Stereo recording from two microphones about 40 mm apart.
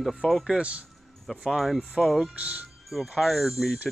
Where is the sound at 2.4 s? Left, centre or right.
Right.